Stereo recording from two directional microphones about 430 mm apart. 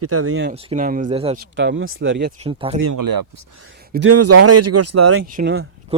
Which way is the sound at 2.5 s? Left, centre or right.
Centre.